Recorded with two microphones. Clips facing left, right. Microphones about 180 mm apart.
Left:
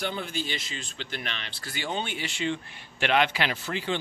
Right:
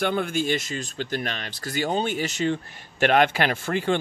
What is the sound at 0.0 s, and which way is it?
Speech, 55° right (ahead or behind).